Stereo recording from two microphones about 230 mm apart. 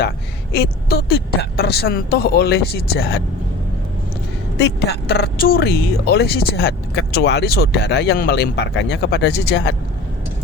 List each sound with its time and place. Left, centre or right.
0.5 s speech: left
4.6 s speech: left